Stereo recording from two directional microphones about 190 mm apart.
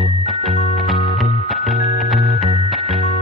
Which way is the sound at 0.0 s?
Centre (ahead or behind).